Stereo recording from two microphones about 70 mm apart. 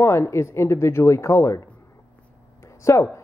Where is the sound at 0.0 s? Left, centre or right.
Left.